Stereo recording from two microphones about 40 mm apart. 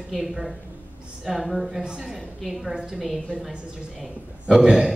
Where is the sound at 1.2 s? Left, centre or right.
Centre.